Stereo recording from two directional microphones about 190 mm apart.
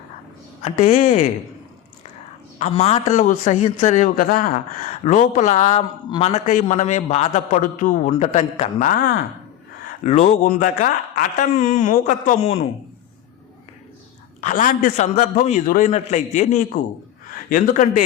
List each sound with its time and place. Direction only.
0.6 s a man's voice: 40° left (ahead or behind)
2.6 s a man's voice: 35° left (ahead or behind)
14.4 s a man's voice: 45° left (ahead or behind)